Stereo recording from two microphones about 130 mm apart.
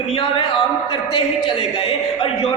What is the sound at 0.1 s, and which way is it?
A man's voice, 45° left (ahead or behind).